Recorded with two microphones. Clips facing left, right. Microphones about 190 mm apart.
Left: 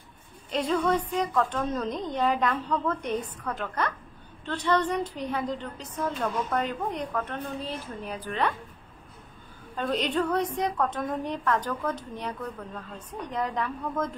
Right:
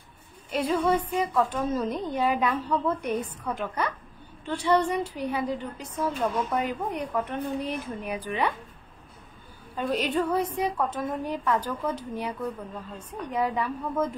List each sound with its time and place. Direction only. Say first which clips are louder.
0.5 s a woman's voice: right 1 dB; 10° right (ahead or behind)
9.8 s a woman's voice: right 1 dB; 10° right (ahead or behind)